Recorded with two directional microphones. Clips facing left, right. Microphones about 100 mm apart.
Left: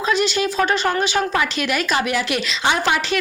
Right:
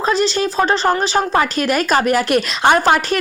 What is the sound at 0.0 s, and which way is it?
Speech, 35° right (ahead or behind).